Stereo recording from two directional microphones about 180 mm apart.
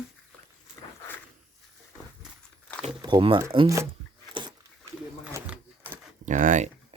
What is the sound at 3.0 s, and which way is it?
Speech, 25° right (ahead or behind).